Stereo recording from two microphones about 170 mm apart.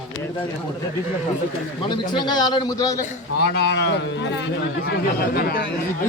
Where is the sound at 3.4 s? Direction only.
80° left.